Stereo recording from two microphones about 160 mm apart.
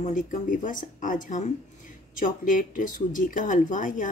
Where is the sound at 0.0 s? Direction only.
55° left (ahead or behind).